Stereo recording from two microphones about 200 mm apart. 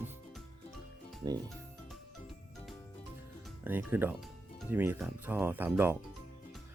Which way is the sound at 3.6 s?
10° right (ahead or behind).